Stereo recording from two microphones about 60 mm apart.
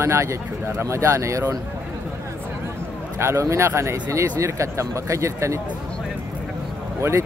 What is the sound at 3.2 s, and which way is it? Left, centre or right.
Speech, right.